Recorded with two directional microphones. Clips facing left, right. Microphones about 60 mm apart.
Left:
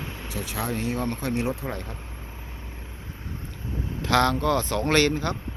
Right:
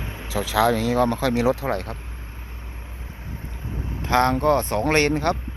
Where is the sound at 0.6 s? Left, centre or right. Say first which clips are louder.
Right 10 dB; right.